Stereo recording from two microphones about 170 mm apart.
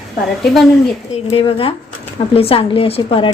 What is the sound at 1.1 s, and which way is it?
A woman's voice, 35° left (ahead or behind).